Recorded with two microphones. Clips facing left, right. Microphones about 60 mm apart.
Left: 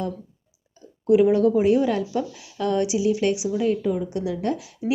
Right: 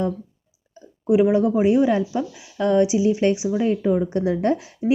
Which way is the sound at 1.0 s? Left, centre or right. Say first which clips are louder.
Even; centre.